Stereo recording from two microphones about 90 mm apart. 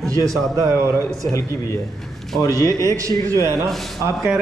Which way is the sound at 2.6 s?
35° right (ahead or behind).